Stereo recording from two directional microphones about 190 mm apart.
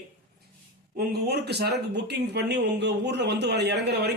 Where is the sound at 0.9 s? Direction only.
60° right (ahead or behind).